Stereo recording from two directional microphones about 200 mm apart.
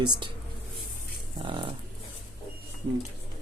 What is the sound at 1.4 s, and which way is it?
Speech, 25° right (ahead or behind).